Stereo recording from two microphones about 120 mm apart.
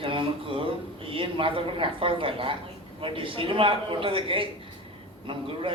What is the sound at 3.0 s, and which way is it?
Speech, 45° right (ahead or behind).